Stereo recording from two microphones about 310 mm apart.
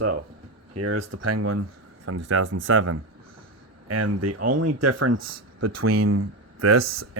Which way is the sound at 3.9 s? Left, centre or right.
Right.